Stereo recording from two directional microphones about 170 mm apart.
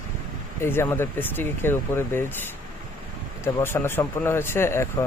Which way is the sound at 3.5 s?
15° left (ahead or behind).